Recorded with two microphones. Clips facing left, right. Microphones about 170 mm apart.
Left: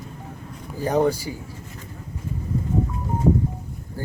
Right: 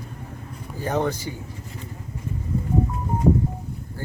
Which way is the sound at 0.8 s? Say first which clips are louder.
Left 4 dB; 10° left (ahead or behind).